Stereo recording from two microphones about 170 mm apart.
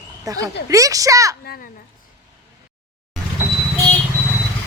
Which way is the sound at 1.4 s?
65° left (ahead or behind).